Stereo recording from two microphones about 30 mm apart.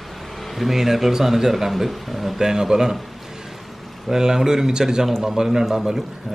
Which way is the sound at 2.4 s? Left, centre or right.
Centre.